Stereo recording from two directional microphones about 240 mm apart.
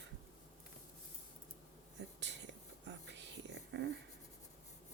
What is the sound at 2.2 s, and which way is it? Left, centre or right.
Whispering, right.